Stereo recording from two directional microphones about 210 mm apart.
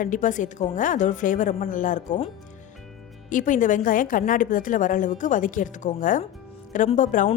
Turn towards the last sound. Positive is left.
turn(degrees=35)  # may be behind; listen again after turning